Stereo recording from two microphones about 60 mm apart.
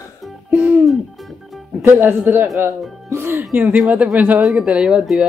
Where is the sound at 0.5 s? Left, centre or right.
Right.